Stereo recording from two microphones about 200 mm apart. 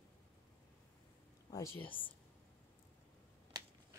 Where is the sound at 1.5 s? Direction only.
15° left (ahead or behind).